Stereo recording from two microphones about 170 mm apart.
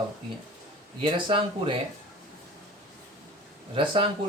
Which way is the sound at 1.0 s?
30° right (ahead or behind).